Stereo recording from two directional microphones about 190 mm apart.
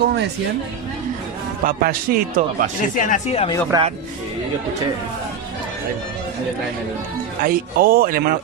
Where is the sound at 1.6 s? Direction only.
50° right (ahead or behind).